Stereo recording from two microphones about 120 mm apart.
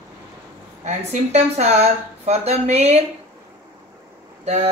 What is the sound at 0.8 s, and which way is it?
A woman's voice, 65° right (ahead or behind).